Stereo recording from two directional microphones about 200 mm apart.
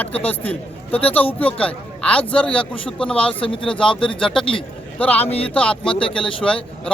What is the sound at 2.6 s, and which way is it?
Speech, 25° left (ahead or behind).